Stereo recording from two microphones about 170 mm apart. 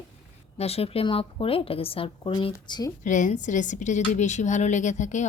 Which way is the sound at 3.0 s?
45° left (ahead or behind).